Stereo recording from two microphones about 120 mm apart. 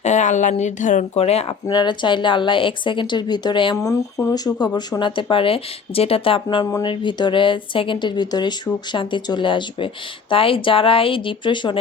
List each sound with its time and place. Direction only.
0.0 s speech: 80° left; by 1.5 s 60° left (ahead or behind)
1.6 s speech: 40° left (ahead or behind)
3.8 s speech: 25° left (ahead or behind)
4.9 s speech: 40° left (ahead or behind)